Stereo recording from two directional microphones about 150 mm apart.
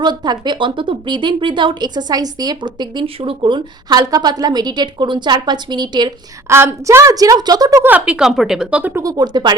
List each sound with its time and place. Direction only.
0.0 s speech: 30° right (ahead or behind)
6.5 s speech: 15° right (ahead or behind)
7.9 s speech: 10° right (ahead or behind); by 9.6 s 30° right (ahead or behind)